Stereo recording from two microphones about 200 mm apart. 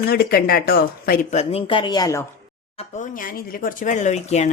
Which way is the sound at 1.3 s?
25° left (ahead or behind).